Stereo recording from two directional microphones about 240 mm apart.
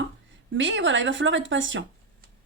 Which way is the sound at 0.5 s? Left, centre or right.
Right.